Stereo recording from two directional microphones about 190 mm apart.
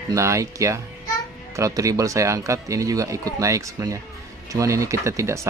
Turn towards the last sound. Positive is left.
turn(degrees=-15)  # may be behind; listen again after turning